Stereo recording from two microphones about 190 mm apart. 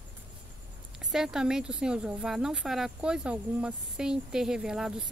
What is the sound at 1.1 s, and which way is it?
Speech, centre (ahead or behind).